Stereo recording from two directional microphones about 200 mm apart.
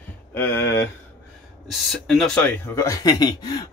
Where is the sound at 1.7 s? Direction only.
Centre (ahead or behind); by 3.6 s 20° left (ahead or behind).